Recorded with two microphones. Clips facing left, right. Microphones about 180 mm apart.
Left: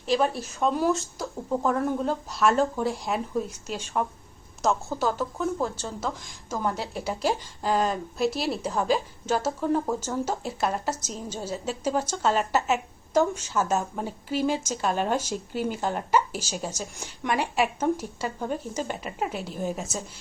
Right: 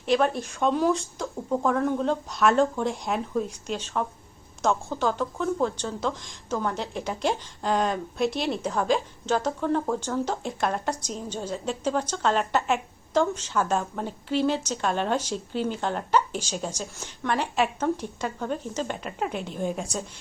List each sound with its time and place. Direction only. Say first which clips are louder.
0.0 s a woman's voice: right 1 dB; centre (ahead or behind)